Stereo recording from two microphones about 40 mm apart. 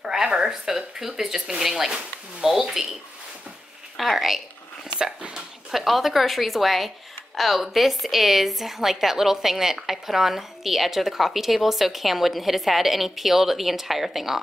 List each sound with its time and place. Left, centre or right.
0.0 s a woman's voice: centre
4.9 s speech: right
5.7 s a woman's voice: centre